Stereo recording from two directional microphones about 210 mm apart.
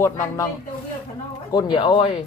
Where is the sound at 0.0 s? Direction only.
15° left (ahead or behind).